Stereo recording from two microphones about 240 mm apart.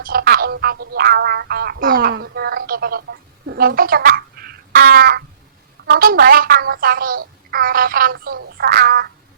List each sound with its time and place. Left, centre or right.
0.0 s a woman's voice: right